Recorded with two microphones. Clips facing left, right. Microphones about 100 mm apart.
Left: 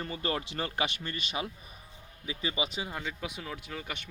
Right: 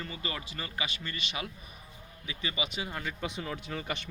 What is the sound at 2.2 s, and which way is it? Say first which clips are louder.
Speech: left 2 dB; 30° left (ahead or behind).